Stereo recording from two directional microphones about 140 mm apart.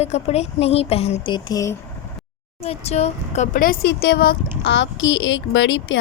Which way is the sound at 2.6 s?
50° left (ahead or behind).